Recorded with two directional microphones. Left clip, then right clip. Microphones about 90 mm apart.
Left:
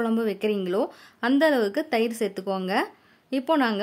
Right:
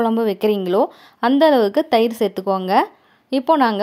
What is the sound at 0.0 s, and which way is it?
A woman's voice, 45° right (ahead or behind).